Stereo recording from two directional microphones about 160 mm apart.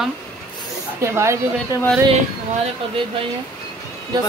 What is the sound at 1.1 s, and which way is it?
Speech, 15° right (ahead or behind).